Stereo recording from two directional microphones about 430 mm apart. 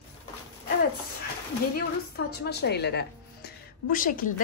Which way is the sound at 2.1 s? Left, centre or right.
Left.